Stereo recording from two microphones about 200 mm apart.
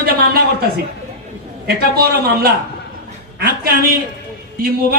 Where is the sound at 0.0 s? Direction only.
50° right (ahead or behind).